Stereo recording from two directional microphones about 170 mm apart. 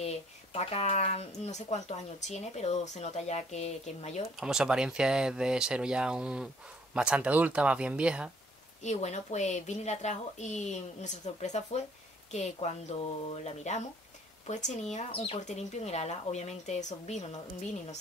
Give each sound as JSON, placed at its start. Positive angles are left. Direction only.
{"t": 0.0, "sound": "speech", "side_deg": 40}
{"t": 4.4, "sound": "speech", "side_deg": -5}
{"t": 8.8, "sound": "speech", "side_deg": 40}